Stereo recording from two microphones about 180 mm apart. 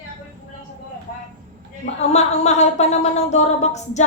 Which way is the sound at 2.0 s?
40° left (ahead or behind).